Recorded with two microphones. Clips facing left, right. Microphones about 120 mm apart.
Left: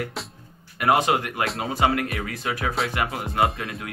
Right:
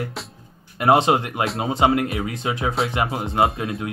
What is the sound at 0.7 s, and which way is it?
Speech, 25° right (ahead or behind).